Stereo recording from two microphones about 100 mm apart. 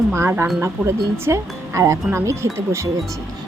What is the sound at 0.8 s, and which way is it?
Speech, 5° right (ahead or behind).